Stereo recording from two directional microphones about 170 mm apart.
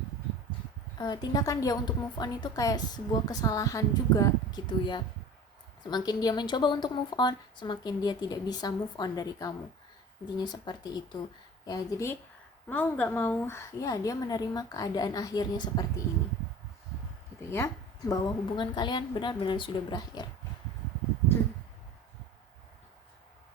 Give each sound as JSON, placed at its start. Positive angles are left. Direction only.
{"t": 0.9, "sound": "a woman's voice", "side_deg": 25}
{"t": 17.5, "sound": "a woman's voice", "side_deg": 15}